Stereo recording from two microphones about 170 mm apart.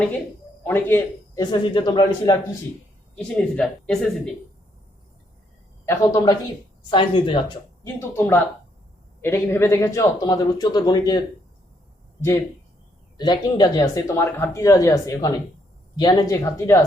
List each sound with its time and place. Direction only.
0.6 s speech: 10° left (ahead or behind)
3.2 s speech: 5° left (ahead or behind)
5.9 s speech: 20° left (ahead or behind)
7.9 s speech: 15° left (ahead or behind)
13.1 s speech: 25° left (ahead or behind)